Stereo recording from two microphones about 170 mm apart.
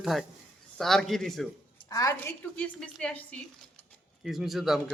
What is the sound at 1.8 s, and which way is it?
Speech, 20° left (ahead or behind).